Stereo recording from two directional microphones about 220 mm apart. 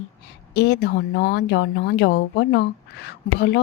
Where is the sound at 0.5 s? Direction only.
50° left (ahead or behind).